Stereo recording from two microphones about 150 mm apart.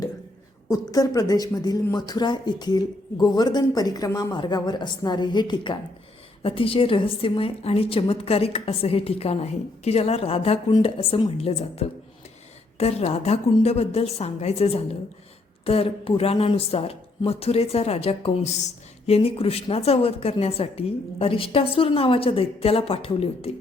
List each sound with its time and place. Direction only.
0.7 s a woman's voice: 25° left (ahead or behind); by 23.6 s 40° left (ahead or behind)